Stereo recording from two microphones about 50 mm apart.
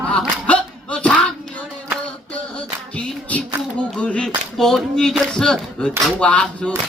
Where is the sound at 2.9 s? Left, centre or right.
Left.